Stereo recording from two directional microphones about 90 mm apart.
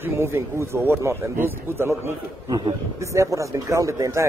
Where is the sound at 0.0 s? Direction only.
30° right (ahead or behind).